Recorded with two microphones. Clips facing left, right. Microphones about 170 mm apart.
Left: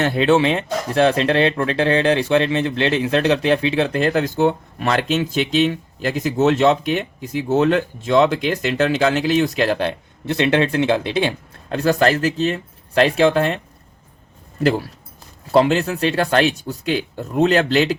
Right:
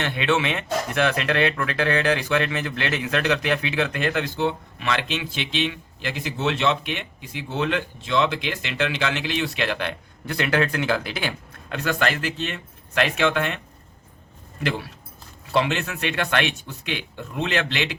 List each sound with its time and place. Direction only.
0.0 s speech: 35° left (ahead or behind)
14.6 s speech: 40° left (ahead or behind)